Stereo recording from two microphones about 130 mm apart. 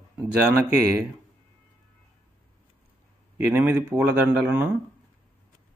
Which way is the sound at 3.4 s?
15° right (ahead or behind).